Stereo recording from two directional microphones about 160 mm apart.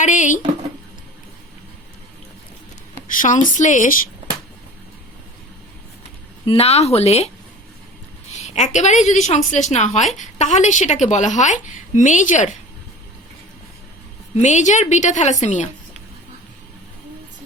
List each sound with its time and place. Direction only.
0.0 s a woman's voice: 50° left (ahead or behind)
3.1 s a woman's voice: 55° left (ahead or behind)
6.4 s speech: 35° left (ahead or behind)
8.4 s a woman's voice: 45° left (ahead or behind)
14.3 s a woman's voice: 45° left (ahead or behind)